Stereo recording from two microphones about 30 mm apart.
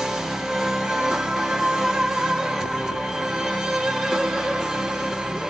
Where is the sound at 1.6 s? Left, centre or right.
Centre.